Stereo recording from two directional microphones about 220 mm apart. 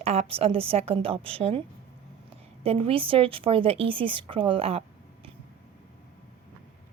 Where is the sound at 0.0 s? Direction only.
30° right (ahead or behind).